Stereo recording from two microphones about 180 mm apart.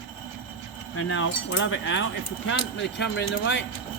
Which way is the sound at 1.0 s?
90° left.